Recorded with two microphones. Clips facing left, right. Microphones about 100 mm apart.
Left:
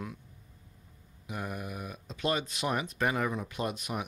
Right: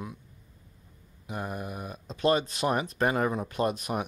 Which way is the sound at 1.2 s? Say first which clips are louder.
Right 3 dB; 35° right (ahead or behind).